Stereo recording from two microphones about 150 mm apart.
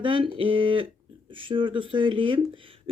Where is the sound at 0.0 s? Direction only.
35° right (ahead or behind).